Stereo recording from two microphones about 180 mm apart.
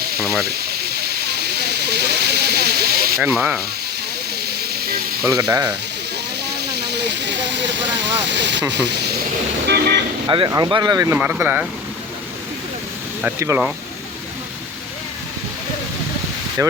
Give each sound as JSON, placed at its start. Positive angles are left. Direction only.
{"t": 0.0, "sound": "snake", "side_deg": -60}
{"t": 3.3, "sound": "speech", "side_deg": 0}
{"t": 4.4, "sound": "steam", "side_deg": -60}
{"t": 5.4, "sound": "speech", "side_deg": -20}
{"t": 6.6, "sound": "hiss", "side_deg": -65}
{"t": 8.3, "sound": "speech", "side_deg": -75}
{"t": 10.2, "sound": "speech", "side_deg": -25}
{"t": 13.2, "sound": "speech", "side_deg": -15}
{"t": 16.6, "sound": "speech", "side_deg": -15}